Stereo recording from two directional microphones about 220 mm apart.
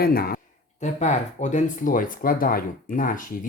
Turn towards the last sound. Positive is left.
turn(degrees=40)  # may be behind; listen again after turning